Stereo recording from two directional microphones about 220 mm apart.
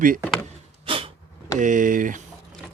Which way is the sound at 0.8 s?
25° right (ahead or behind).